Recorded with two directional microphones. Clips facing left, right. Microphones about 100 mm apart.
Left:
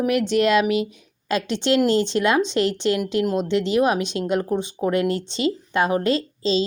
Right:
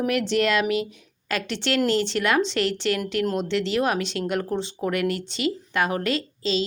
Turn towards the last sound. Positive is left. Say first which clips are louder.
# left 4 dB
turn(degrees=25)  # may be behind; listen again after turning